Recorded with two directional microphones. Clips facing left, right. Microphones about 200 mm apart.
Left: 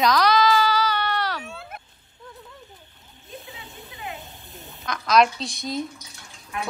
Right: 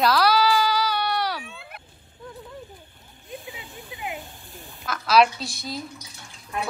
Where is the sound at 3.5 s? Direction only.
15° right (ahead or behind).